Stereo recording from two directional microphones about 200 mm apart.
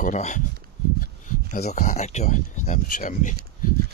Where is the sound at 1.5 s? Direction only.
35° left (ahead or behind).